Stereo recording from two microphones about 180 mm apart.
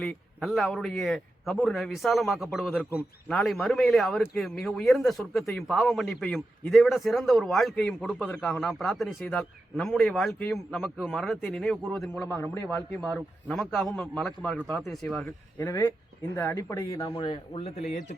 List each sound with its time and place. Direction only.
0.0 s speech: centre (ahead or behind)
13.0 s speech: centre (ahead or behind)
15.6 s speech: 15° left (ahead or behind); by 18.2 s 40° left (ahead or behind)